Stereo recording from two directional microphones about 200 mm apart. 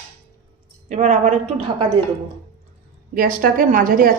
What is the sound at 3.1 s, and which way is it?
A woman's voice, 45° right (ahead or behind).